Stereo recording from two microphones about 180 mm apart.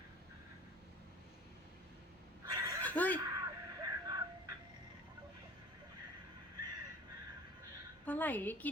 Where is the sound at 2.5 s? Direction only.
20° right (ahead or behind).